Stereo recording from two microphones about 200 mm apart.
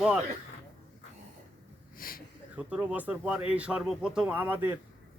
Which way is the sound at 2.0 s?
45° left (ahead or behind).